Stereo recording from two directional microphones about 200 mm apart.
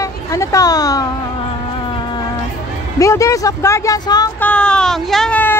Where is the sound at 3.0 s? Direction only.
15° left (ahead or behind).